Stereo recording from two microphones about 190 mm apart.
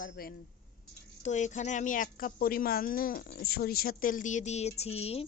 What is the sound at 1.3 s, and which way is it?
Speech, 40° left (ahead or behind).